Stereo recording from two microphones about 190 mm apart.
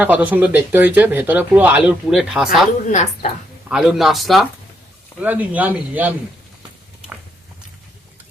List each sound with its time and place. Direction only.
0.0 s speech: 10° right (ahead or behind)
2.9 s a woman's voice: 40° left (ahead or behind)
3.7 s speech: 5° right (ahead or behind)